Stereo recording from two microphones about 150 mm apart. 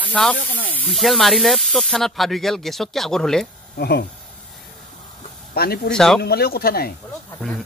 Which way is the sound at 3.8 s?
90° left.